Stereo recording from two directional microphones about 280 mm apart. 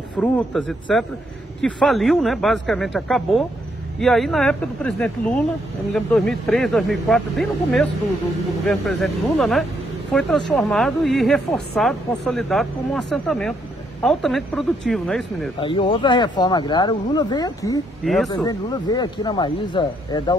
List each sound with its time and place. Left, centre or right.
0.2 s speech: centre
15.6 s speech: centre
18.0 s speech: centre
18.3 s speech: centre